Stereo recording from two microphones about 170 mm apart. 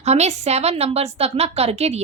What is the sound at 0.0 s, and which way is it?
A woman's voice, 40° right (ahead or behind).